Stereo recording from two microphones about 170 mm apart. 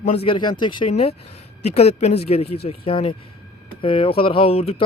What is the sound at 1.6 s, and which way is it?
Speech, 40° left (ahead or behind).